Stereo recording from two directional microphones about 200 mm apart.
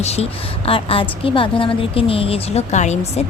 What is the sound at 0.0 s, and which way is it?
A woman's voice, 30° left (ahead or behind).